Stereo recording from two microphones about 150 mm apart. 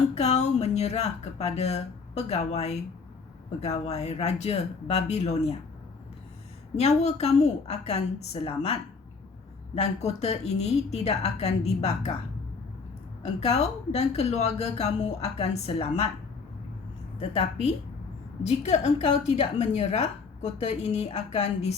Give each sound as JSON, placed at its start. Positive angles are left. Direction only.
{"t": 0.1, "sound": "a woman's voice", "side_deg": 50}
{"t": 6.7, "sound": "a woman's voice", "side_deg": 45}
{"t": 13.2, "sound": "a woman's voice", "side_deg": 45}
{"t": 17.2, "sound": "a woman's voice", "side_deg": 45}